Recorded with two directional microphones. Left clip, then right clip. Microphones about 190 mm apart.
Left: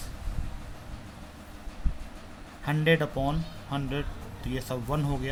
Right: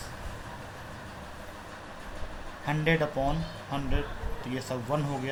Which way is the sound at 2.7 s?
55° left (ahead or behind).